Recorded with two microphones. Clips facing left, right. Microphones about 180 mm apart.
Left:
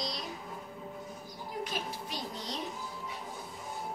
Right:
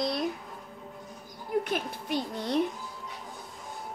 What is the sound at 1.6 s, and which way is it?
Speech, 55° right (ahead or behind).